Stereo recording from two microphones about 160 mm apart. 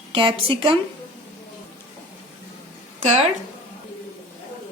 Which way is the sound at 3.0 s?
45° right (ahead or behind).